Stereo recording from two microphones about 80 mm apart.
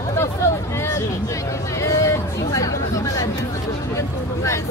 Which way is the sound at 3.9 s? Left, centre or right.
Left.